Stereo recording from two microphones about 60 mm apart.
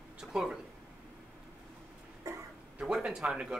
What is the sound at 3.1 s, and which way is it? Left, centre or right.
Speech, centre.